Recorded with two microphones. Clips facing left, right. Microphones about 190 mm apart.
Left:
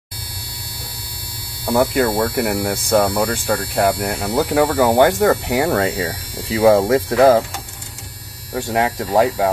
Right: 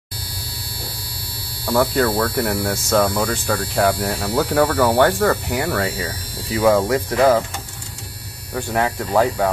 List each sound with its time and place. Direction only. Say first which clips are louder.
1.7 s speech: left 1 dB; 20° left (ahead or behind)
2.5 s hum: left 2 dB; 15° left (ahead or behind)
3.4 s hum: right 1 dB; centre (ahead or behind)
4.2 s hum: left 2 dB; 15° left (ahead or behind)
4.6 s speech: left 2 dB; 15° left (ahead or behind)
8.5 s speech: left 2 dB; 20° left (ahead or behind)